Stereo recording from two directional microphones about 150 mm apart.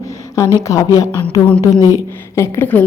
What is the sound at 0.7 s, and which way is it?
Speech, 20° left (ahead or behind).